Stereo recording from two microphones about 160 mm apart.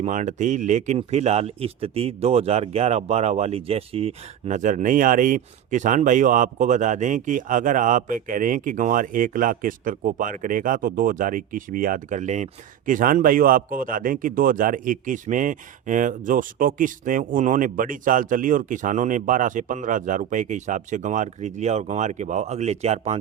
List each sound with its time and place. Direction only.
0.0 s speech: 50° right (ahead or behind)